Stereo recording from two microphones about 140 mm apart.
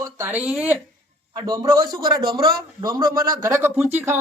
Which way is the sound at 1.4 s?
30° right (ahead or behind).